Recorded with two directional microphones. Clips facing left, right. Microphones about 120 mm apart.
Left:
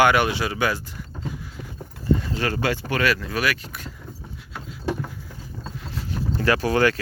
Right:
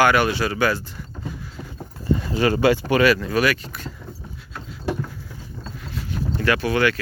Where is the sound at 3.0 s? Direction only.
Centre (ahead or behind).